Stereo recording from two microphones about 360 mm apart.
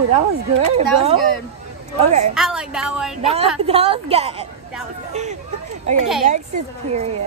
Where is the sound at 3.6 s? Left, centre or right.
Centre.